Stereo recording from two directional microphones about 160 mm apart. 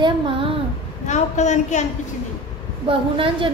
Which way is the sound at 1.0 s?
45° left (ahead or behind).